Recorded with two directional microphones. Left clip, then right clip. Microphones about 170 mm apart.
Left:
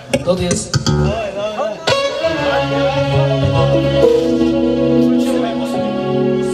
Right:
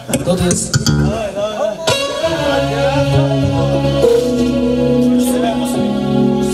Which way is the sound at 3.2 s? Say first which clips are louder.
Left 1 dB; 20° right (ahead or behind).